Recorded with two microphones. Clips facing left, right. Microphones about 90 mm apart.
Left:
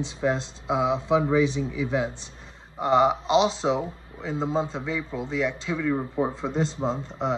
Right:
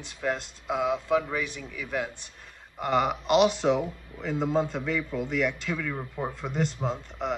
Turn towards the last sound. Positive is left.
turn(degrees=30)  # may be behind; listen again after turning